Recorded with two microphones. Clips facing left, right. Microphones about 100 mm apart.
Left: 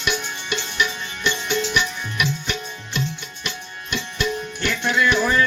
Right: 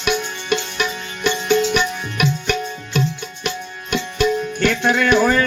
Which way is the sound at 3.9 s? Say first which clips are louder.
Right 7 dB; 50° right (ahead or behind).